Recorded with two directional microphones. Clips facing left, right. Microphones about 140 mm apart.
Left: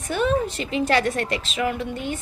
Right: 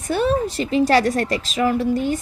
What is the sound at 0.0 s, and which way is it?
A woman's voice, 35° right (ahead or behind).